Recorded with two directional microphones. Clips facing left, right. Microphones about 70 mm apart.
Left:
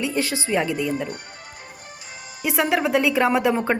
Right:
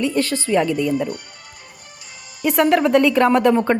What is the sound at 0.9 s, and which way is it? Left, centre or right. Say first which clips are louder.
Speech: right 5 dB; left.